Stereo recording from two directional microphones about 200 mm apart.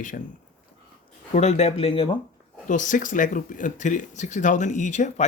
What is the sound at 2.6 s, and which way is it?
Speech, 40° left (ahead or behind).